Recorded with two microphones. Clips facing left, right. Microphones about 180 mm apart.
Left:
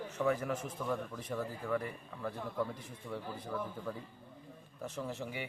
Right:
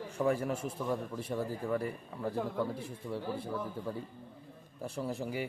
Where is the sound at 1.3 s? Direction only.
30° right (ahead or behind).